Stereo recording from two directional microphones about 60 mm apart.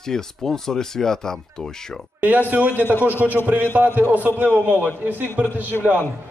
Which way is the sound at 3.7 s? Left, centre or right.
Right.